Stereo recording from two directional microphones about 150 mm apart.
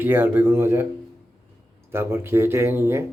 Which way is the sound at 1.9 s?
15° right (ahead or behind).